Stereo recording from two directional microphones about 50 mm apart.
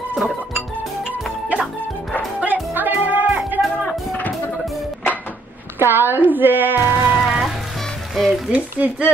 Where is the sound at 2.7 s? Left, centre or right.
Right.